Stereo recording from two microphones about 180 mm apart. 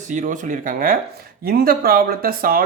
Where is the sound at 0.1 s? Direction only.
45° right (ahead or behind).